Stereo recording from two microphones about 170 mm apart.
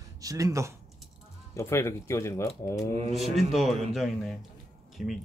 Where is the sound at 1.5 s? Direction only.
15° left (ahead or behind).